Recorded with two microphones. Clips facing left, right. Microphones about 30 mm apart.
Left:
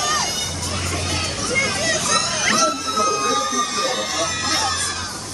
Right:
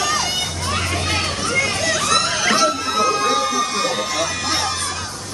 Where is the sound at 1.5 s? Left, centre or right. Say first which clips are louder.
Even; centre.